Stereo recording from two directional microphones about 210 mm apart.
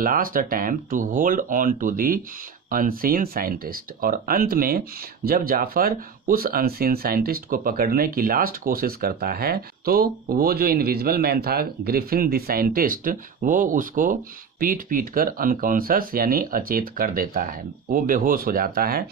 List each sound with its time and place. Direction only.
0.0 s speech: 40° right (ahead or behind)